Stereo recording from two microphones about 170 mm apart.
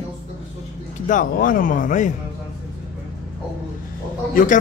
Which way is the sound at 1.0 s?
50° left (ahead or behind).